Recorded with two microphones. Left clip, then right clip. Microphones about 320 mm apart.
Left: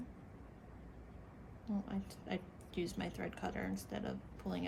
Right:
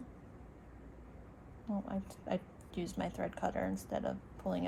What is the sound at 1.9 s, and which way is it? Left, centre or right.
Speech, centre.